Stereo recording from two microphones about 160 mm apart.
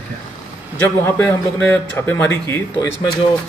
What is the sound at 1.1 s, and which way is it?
Speech, 15° left (ahead or behind).